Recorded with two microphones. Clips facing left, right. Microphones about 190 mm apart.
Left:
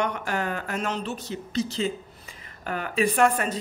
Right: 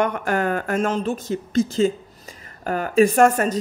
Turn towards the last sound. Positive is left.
turn(degrees=-40)  # may be behind; listen again after turning